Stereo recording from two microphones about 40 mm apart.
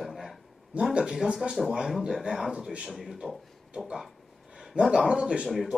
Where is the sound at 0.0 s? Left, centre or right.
Centre.